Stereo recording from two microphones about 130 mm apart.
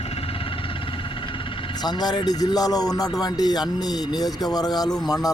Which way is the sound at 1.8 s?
30° left (ahead or behind).